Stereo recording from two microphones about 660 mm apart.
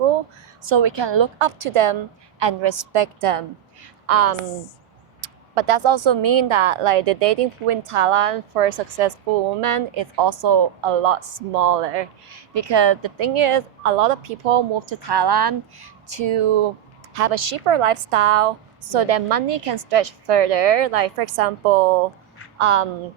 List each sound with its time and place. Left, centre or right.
0.7 s a woman's voice: right
12.3 s speech: right
17.2 s a woman's voice: right
22.5 s speech: right